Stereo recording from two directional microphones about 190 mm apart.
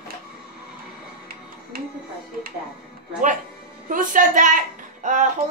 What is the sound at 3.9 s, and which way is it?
Speech, 45° right (ahead or behind).